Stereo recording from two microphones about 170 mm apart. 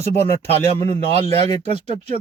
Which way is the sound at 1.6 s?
40° right (ahead or behind).